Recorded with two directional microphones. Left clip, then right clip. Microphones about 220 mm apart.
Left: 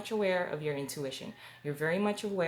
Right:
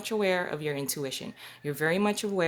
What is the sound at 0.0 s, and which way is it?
Speech, 50° right (ahead or behind).